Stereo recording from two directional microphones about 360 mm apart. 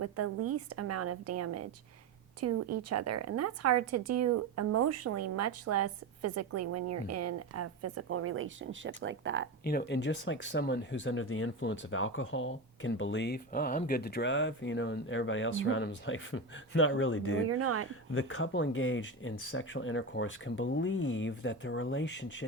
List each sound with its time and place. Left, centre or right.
0.5 s a woman's voice: right
9.6 s speech: left
17.5 s a woman's voice: right
18.1 s speech: left